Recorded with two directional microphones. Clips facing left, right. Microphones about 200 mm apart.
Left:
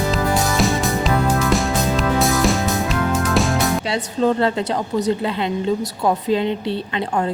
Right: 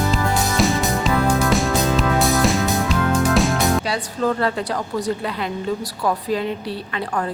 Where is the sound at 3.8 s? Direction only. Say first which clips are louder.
Left 3 dB; 25° left (ahead or behind).